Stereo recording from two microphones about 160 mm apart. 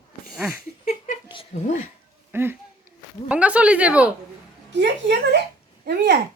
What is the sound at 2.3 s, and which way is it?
A woman's voice, 15° right (ahead or behind).